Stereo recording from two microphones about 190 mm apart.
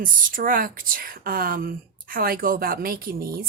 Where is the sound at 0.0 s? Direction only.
45° right (ahead or behind).